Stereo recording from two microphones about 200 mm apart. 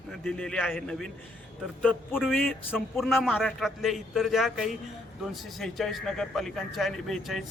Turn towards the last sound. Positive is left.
turn(degrees=0)  # may be behind; listen again after turning